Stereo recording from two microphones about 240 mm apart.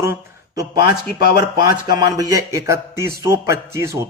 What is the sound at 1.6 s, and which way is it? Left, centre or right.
A man's voice, centre.